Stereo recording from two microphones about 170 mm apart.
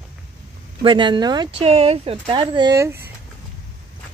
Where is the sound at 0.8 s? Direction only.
30° right (ahead or behind).